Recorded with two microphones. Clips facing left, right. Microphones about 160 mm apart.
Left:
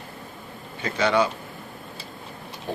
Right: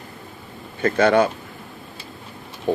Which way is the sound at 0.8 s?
50° right (ahead or behind).